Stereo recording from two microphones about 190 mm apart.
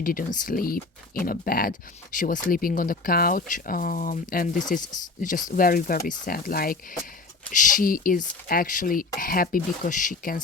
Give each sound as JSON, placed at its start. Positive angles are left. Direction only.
{"t": 0.0, "sound": "speech", "side_deg": 50}